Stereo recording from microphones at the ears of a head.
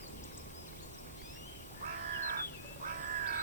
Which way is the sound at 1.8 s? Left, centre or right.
Right.